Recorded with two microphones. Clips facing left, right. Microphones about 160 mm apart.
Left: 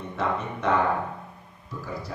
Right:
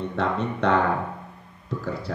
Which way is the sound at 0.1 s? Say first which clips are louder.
Left 1 dB; 70° right (ahead or behind).